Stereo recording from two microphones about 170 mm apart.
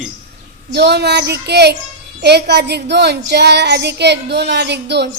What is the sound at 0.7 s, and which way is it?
Child singing, 80° right.